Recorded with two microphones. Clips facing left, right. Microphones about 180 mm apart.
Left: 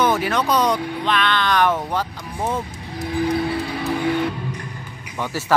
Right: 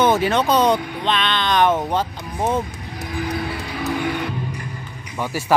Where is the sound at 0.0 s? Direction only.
25° right (ahead or behind).